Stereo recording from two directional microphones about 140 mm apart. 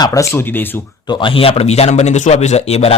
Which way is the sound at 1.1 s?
35° left (ahead or behind).